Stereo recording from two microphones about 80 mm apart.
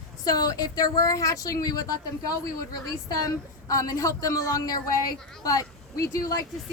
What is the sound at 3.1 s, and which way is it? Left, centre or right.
A woman's voice, left.